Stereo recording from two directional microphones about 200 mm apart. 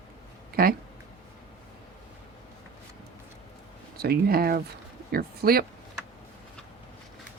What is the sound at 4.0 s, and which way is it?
Speech, 50° right (ahead or behind).